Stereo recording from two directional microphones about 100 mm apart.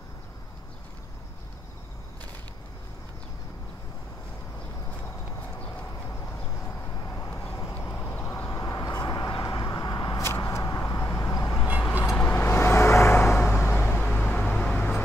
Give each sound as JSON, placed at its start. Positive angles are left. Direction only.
{"t": 6.0, "sound": "vehicle", "side_deg": 25}
{"t": 7.7, "sound": "vehicle", "side_deg": 20}
{"t": 8.5, "sound": "vehicle", "side_deg": 30}
{"t": 10.2, "sound": "vehicle", "side_deg": 25}